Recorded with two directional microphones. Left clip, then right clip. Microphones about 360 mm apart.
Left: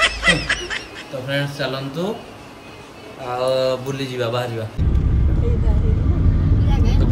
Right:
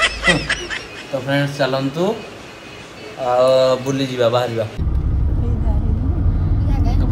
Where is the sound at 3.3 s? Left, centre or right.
Centre.